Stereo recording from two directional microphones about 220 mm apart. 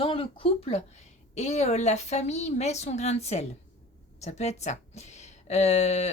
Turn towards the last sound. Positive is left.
turn(degrees=30)  # may be behind; listen again after turning